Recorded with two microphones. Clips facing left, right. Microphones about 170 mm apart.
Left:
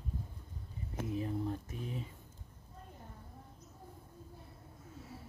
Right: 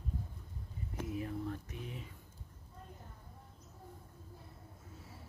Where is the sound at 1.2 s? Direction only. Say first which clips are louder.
Left 3 dB; 30° left (ahead or behind).